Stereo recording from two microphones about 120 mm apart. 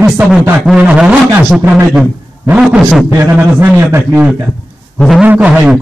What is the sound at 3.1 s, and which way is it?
A man's voice, 20° right (ahead or behind).